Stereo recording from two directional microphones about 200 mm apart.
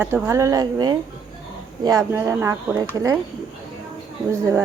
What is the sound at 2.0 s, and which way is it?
Speech, 15° right (ahead or behind).